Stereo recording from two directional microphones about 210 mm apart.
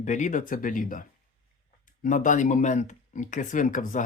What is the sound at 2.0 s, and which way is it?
Speech, 35° left (ahead or behind).